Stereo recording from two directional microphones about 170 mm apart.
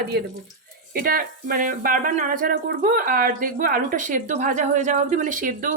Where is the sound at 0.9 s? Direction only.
60° right (ahead or behind).